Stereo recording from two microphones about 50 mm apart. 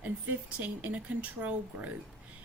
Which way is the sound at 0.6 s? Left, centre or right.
Right.